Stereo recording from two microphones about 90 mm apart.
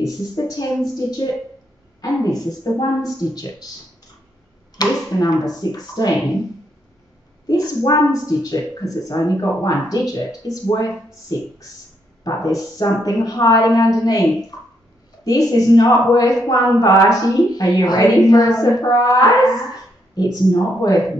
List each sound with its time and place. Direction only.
0.0 s a woman's voice: 45° left (ahead or behind)
4.7 s a woman's voice: 45° left (ahead or behind)
7.4 s a woman's voice: 45° left (ahead or behind)
15.2 s a woman's voice: 40° left (ahead or behind)